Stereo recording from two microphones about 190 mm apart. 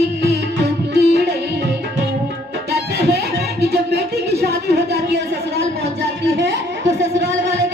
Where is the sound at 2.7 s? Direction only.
60° right (ahead or behind).